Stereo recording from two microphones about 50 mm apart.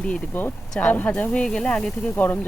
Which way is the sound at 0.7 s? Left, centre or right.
Left.